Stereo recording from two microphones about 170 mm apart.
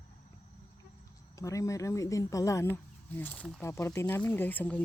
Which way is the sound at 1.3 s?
20° left (ahead or behind).